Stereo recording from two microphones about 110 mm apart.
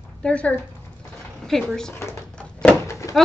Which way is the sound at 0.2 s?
10° left (ahead or behind).